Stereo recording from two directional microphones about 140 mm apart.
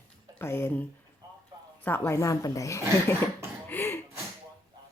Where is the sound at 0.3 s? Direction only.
15° left (ahead or behind).